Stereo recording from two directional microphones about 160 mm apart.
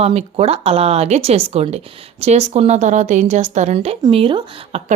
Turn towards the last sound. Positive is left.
turn(degrees=-35)  # may be behind; listen again after turning